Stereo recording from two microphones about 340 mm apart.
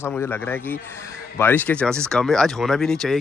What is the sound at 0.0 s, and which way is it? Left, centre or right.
Speech, centre.